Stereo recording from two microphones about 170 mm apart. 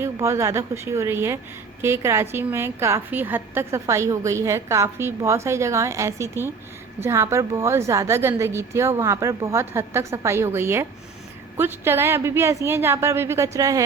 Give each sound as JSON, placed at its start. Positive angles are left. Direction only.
{"t": 0.0, "sound": "a woman's voice", "side_deg": -15}